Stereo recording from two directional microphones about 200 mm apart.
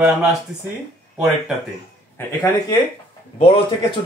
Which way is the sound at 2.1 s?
20° left (ahead or behind).